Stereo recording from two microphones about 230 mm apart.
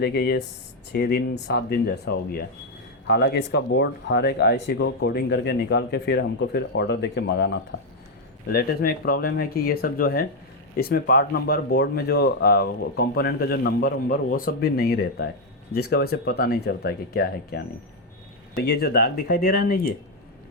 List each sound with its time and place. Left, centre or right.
0.0 s speech: left